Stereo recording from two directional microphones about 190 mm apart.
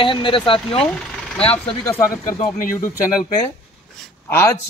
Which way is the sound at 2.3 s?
20° left (ahead or behind).